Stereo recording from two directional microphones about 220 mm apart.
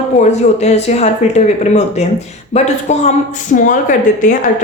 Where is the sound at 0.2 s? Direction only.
30° left (ahead or behind).